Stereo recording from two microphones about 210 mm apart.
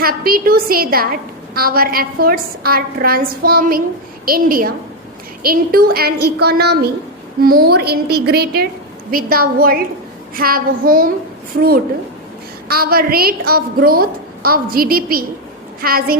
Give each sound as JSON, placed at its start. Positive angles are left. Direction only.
{"t": 0.0, "sound": "a woman's voice", "side_deg": -45}
{"t": 12.6, "sound": "a woman's voice", "side_deg": -45}